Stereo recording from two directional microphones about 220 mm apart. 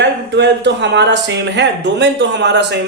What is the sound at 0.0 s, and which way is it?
Speech, 50° right (ahead or behind).